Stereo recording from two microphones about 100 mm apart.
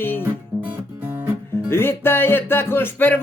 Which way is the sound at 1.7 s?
25° left (ahead or behind).